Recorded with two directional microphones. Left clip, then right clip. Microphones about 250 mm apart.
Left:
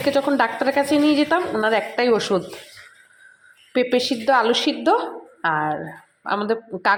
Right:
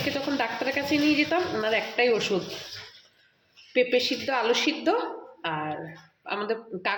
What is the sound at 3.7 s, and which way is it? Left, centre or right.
Speech, centre.